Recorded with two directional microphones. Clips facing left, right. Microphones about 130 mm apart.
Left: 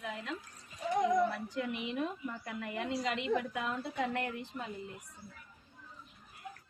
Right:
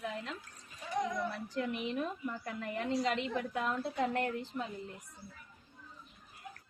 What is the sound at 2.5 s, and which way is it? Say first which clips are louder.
A woman's voice: right 1 dB; 35° right (ahead or behind).